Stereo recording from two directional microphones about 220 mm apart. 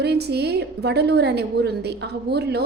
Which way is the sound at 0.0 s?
45° right (ahead or behind).